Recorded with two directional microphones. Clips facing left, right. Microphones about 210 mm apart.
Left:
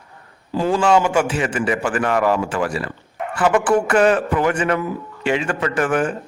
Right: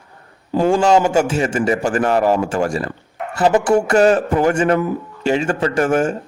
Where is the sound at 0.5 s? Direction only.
50° right (ahead or behind).